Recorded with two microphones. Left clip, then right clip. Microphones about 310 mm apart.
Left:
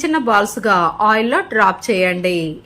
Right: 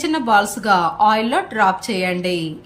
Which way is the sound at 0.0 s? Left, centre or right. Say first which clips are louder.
Left 1 dB; centre.